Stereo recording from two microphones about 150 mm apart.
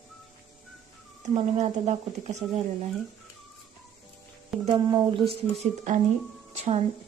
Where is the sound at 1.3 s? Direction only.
50° right (ahead or behind).